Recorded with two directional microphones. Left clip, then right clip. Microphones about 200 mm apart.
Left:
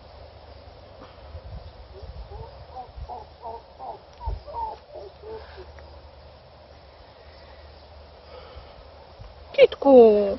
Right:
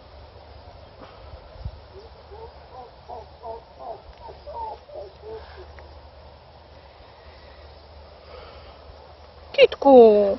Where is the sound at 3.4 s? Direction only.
40° left (ahead or behind).